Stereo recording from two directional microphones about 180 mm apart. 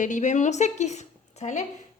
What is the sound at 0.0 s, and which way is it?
A woman's voice, 45° left (ahead or behind).